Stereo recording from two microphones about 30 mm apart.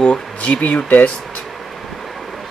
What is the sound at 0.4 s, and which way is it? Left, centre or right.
Speech, left.